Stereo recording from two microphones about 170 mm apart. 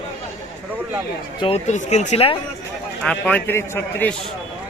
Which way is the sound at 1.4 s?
35° left (ahead or behind).